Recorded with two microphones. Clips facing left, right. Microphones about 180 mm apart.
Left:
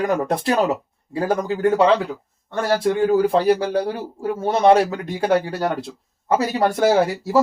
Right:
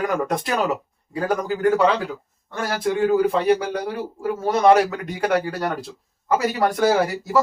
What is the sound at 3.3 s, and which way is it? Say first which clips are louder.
Speech: left 2 dB; 35° left (ahead or behind).